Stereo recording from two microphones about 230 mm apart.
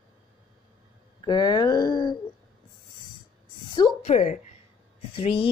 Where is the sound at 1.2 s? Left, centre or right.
Centre.